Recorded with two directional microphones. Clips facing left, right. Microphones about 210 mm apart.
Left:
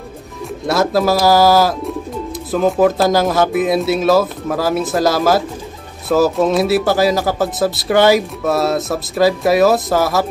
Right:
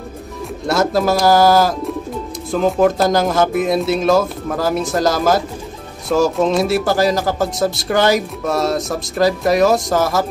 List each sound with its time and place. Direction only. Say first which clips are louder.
0.7 s speech: left 1 dB; 5° left (ahead or behind)